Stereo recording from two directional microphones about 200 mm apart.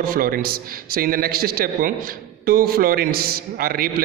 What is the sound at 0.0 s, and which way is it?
A man's voice, 45° right (ahead or behind).